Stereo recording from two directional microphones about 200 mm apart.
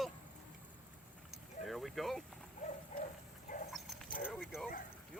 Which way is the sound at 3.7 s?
Centre (ahead or behind).